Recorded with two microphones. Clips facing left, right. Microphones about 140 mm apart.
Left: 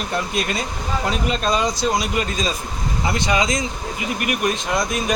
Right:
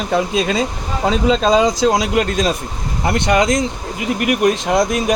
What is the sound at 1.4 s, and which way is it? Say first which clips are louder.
Speech: right 7 dB; 90° right.